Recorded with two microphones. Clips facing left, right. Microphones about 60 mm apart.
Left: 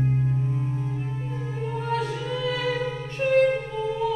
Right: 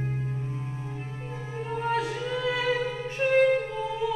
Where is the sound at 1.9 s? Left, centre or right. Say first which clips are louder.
Left 1 dB; centre.